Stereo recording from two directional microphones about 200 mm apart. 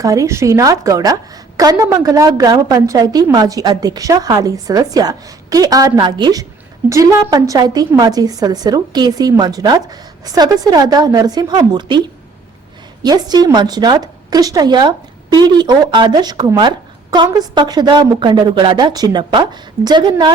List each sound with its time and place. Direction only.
0.0 s a woman's voice: 15° right (ahead or behind)